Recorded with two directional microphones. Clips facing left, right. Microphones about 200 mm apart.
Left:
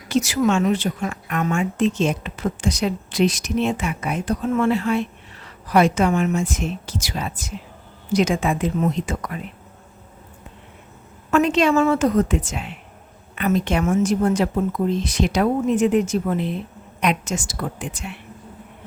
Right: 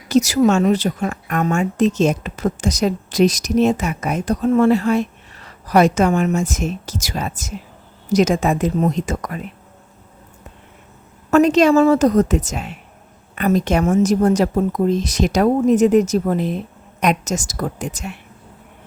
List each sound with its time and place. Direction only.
0.1 s a woman's voice: 40° right (ahead or behind)
11.3 s a woman's voice: 40° right (ahead or behind)